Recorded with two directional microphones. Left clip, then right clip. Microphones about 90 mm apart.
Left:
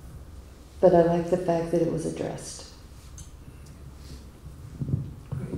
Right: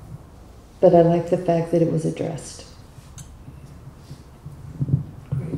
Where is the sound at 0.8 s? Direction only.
25° right (ahead or behind).